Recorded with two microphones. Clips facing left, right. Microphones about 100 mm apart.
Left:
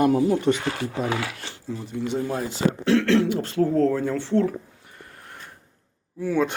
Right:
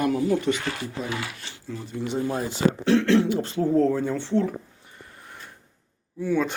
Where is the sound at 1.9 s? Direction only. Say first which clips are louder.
Even; centre (ahead or behind).